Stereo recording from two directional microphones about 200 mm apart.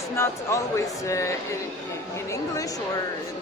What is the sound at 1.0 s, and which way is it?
Speech, 15° left (ahead or behind).